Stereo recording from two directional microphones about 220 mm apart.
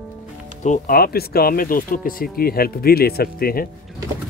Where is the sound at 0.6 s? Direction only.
40° left (ahead or behind).